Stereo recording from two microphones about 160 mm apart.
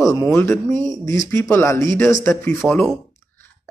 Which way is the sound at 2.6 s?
Centre (ahead or behind).